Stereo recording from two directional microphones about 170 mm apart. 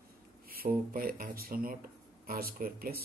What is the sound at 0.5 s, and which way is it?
Speech, 60° right (ahead or behind).